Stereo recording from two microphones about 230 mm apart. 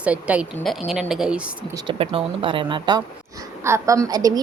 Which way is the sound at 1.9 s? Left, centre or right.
Right.